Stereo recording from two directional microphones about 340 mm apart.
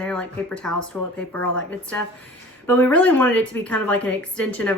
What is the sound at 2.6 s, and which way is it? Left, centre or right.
A woman's voice, centre.